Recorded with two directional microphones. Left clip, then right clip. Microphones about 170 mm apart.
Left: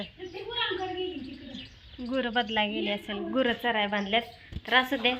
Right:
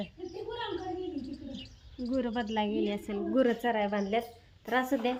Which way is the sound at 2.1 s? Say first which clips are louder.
Left 5 dB; 10° right (ahead or behind).